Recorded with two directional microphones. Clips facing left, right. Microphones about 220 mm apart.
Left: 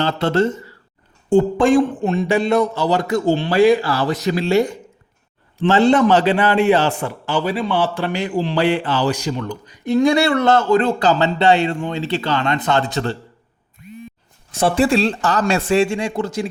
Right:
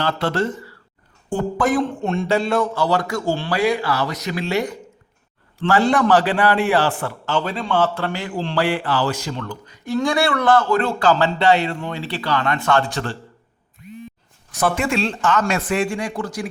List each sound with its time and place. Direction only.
0.0 s speech: 25° left (ahead or behind)
1.8 s speech: 5° left (ahead or behind)
2.2 s speech: 15° left (ahead or behind)
14.5 s speech: 30° left (ahead or behind)